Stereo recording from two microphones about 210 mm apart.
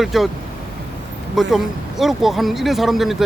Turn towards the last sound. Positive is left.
turn(degrees=0)  # may be behind; listen again after turning